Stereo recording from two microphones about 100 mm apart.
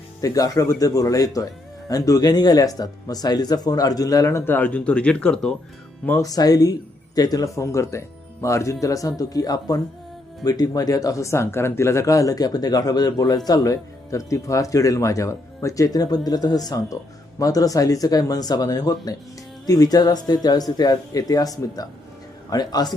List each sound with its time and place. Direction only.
0.2 s speech: 35° left (ahead or behind); by 5.5 s 10° left (ahead or behind)
6.1 s speech: 35° left (ahead or behind)